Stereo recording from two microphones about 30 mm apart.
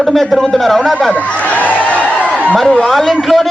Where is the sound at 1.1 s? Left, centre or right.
Left.